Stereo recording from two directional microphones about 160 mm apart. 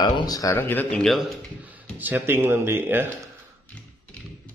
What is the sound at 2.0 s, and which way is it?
Speech, 10° right (ahead or behind).